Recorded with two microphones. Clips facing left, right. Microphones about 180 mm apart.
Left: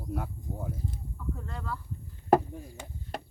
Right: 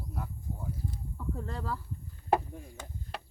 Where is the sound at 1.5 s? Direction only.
35° right (ahead or behind).